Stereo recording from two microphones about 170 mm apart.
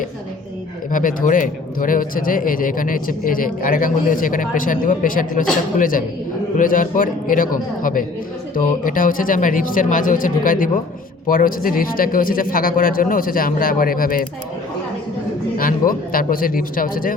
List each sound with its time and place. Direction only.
0.9 s a man's voice: 50° left (ahead or behind)
15.9 s a man's voice: 55° left (ahead or behind)